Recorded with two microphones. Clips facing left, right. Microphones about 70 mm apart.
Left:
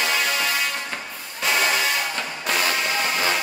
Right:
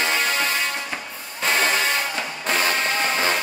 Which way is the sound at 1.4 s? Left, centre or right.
Right.